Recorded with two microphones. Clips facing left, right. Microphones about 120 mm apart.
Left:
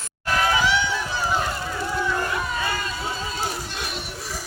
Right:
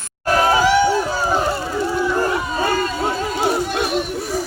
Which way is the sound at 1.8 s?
25° right (ahead or behind).